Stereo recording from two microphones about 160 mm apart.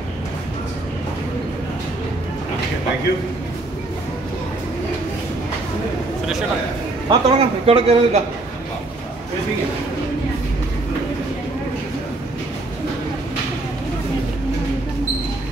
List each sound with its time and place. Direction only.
7.1 s speech: 35° right (ahead or behind)